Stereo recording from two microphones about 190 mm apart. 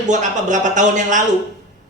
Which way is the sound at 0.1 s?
40° right (ahead or behind).